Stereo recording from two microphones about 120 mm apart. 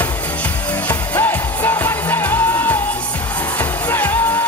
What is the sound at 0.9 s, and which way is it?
Music, 15° left (ahead or behind).